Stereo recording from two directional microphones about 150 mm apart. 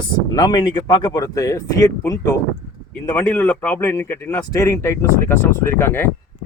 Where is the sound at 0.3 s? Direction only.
25° left (ahead or behind).